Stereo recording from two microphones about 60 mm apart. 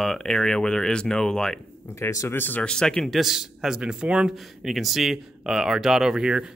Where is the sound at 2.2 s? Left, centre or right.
Left.